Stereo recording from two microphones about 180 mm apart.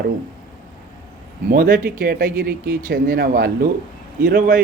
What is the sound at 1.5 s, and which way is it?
Speech, 55° right (ahead or behind).